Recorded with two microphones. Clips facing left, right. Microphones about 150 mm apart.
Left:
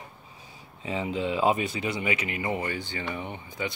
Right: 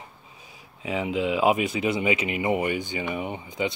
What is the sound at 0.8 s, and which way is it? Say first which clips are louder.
Speech: right 3 dB; 10° right (ahead or behind).